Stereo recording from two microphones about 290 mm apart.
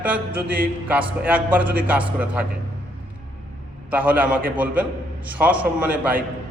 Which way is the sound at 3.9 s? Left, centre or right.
Centre.